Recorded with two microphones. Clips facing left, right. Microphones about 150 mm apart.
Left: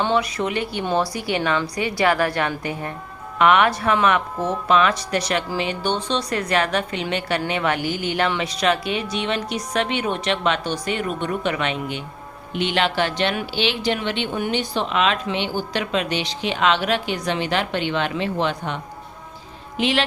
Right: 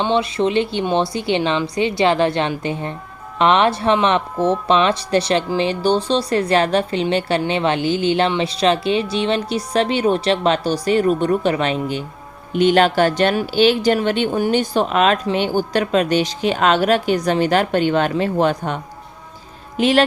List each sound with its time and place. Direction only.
0.0 s a woman's voice: 25° right (ahead or behind); by 20.1 s 45° right (ahead or behind)